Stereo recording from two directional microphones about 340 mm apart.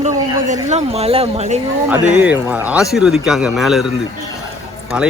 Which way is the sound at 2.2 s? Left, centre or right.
Centre.